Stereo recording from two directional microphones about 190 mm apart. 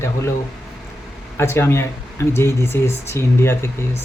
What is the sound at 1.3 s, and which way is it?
Speech, 15° left (ahead or behind).